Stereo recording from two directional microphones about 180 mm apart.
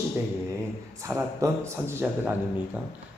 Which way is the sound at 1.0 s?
15° right (ahead or behind).